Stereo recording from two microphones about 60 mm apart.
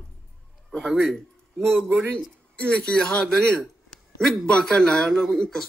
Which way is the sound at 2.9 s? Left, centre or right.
Centre.